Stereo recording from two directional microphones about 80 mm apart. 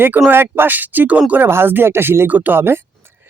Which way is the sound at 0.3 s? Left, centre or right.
Right.